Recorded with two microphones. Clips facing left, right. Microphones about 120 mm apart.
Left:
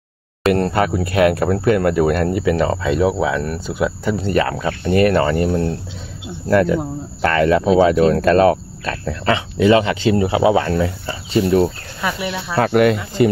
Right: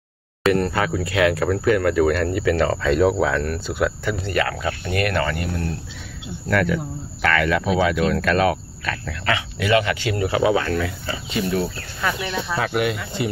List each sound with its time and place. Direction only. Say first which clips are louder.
0.5 s speech: left 3 dB; 30° left (ahead or behind)
2.8 s speech: left 1 dB; 10° left (ahead or behind)
3.7 s speech: left 4 dB; 25° left (ahead or behind); by 11.7 s 40° left (ahead or behind)
12.0 s speech: left 2 dB; 10° left (ahead or behind)
12.5 s speech: left 9 dB; 50° left (ahead or behind)